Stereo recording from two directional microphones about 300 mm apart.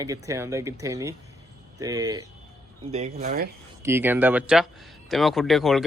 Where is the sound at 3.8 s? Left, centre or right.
Centre.